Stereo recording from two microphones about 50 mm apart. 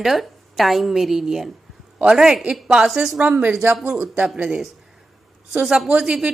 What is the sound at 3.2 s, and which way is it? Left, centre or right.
Speech, right.